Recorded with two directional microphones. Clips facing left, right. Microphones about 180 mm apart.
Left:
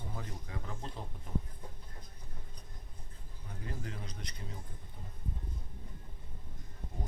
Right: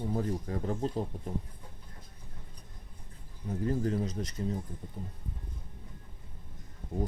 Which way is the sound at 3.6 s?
40° right (ahead or behind).